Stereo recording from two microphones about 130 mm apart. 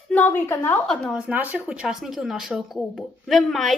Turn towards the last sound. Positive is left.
turn(degrees=0)  # may be behind; listen again after turning